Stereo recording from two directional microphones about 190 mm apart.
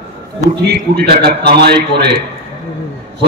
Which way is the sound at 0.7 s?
55° right (ahead or behind).